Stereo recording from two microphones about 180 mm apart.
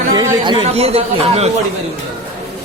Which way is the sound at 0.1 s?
20° right (ahead or behind).